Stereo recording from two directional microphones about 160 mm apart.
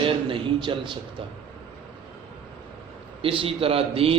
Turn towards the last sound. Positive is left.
turn(degrees=-35)  # may be behind; listen again after turning